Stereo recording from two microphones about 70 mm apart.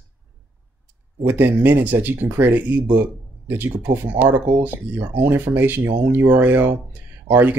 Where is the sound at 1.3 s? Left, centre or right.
Right.